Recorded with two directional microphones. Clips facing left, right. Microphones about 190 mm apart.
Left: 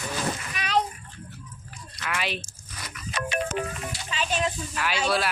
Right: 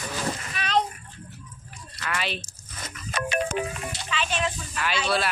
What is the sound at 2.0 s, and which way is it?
Speech, 10° left (ahead or behind).